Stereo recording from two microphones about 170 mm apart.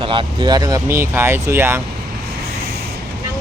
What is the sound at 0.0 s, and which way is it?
Speech, 30° right (ahead or behind).